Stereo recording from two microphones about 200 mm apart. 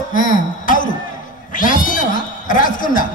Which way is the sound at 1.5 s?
40° left (ahead or behind).